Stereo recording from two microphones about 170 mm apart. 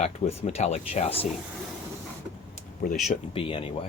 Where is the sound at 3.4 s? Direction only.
30° left (ahead or behind).